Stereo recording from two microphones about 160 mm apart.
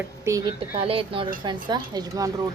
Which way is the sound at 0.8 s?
35° right (ahead or behind).